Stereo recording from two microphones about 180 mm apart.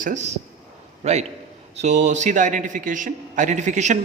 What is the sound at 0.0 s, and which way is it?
A man's voice, 40° right (ahead or behind).